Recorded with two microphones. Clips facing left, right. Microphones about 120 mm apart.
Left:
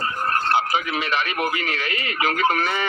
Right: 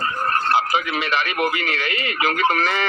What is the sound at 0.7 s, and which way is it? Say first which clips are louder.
Speech: right 2 dB; 85° right.